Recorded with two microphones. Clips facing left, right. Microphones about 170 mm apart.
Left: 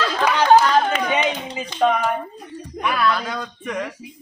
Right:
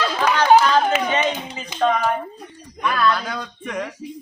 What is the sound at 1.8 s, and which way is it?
A man's voice, 5° left (ahead or behind).